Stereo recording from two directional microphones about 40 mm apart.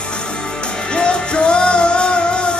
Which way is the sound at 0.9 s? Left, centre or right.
Left.